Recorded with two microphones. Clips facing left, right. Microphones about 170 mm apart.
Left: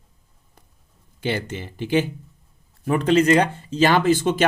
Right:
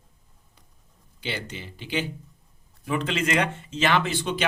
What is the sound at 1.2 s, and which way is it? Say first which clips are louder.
Speech: left 8 dB; 50° left (ahead or behind).